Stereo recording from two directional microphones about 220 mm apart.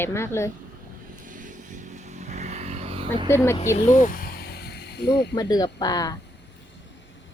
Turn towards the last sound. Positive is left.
turn(degrees=15)  # may be behind; listen again after turning